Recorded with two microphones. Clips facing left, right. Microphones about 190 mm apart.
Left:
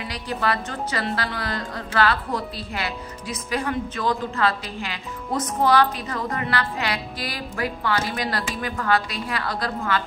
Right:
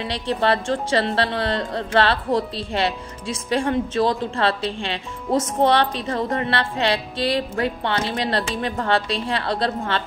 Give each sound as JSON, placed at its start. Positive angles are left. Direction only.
{"t": 0.0, "sound": "a woman's voice", "side_deg": -30}